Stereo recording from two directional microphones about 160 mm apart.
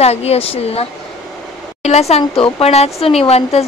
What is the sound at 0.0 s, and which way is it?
A woman's voice, 40° left (ahead or behind).